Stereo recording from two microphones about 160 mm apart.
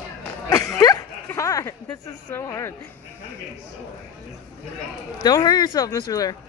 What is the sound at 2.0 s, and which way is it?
Speech, 20° left (ahead or behind).